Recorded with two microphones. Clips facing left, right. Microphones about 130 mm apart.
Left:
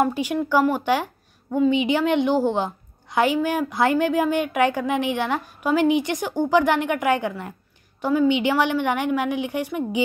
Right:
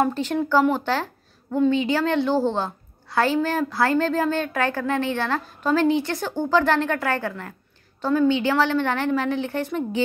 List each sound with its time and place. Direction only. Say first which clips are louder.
0.0 s a woman's voice: even; 10° left (ahead or behind)